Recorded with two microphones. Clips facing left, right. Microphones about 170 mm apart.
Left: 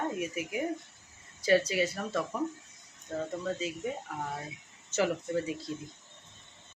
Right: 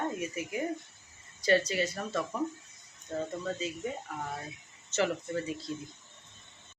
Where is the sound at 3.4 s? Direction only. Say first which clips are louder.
Left 1 dB; 5° left (ahead or behind).